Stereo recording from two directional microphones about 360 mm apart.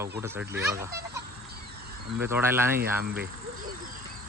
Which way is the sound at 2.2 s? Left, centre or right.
Centre.